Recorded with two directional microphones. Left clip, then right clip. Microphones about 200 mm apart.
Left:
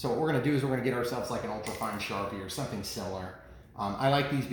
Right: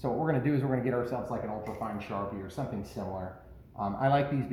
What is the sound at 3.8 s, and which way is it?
Speech, 5° right (ahead or behind).